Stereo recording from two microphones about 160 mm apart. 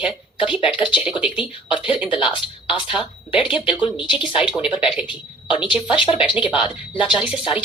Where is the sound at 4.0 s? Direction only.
30° left (ahead or behind).